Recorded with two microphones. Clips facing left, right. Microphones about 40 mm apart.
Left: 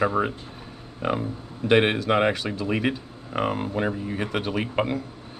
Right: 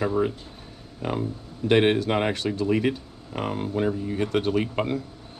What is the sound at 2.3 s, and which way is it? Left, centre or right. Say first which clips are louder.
Speech: right 2 dB; centre.